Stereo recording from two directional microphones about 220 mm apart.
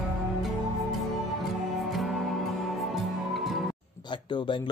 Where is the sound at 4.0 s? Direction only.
20° left (ahead or behind).